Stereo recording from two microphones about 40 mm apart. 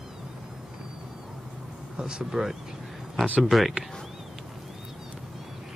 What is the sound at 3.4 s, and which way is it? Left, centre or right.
Speech, centre.